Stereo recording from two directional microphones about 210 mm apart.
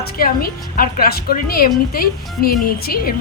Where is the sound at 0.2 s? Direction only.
45° left (ahead or behind).